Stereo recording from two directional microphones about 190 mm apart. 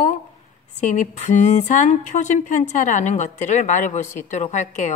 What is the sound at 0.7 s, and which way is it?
Speech, 40° left (ahead or behind).